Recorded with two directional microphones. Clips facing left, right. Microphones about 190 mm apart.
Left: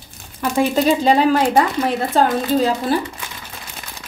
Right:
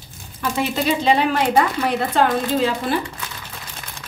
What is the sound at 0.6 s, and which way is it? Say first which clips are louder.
Speech: left 5 dB; 45° left (ahead or behind).